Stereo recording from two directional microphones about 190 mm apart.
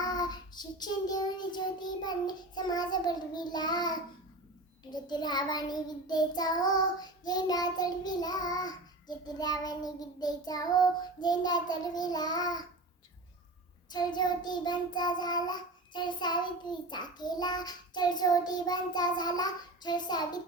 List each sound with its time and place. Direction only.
0.0 s child singing: 20° left (ahead or behind)
13.9 s child singing: 20° left (ahead or behind)